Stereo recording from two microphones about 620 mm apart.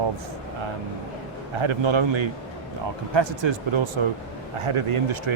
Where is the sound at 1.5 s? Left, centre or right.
Right.